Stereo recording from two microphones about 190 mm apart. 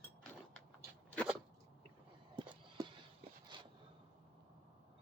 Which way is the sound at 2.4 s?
25° right (ahead or behind).